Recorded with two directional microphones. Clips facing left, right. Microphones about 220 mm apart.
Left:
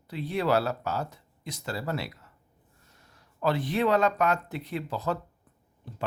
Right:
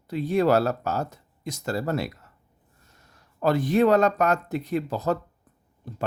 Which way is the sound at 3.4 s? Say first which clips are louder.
Right 6 dB; 45° right (ahead or behind).